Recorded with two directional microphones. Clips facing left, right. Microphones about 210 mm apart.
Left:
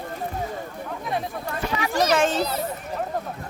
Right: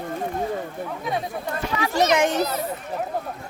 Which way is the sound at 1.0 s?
Centre (ahead or behind).